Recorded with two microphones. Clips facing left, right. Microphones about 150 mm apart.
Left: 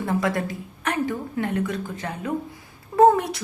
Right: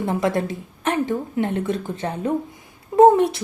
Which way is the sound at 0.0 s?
20° right (ahead or behind).